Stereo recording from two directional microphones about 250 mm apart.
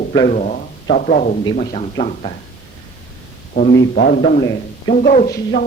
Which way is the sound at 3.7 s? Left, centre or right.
Left.